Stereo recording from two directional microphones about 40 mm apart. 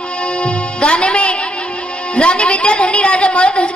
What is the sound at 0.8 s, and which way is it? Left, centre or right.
A woman's voice, left.